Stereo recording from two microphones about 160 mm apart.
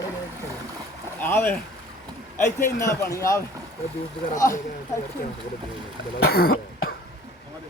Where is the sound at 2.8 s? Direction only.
20° left (ahead or behind).